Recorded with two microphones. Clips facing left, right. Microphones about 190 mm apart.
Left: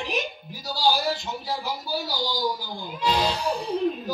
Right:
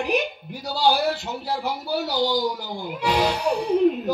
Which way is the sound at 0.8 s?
60° right (ahead or behind).